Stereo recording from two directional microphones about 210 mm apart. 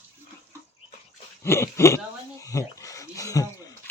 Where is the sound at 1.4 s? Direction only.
10° left (ahead or behind).